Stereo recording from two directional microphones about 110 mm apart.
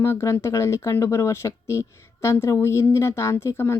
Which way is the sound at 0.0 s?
25° left (ahead or behind).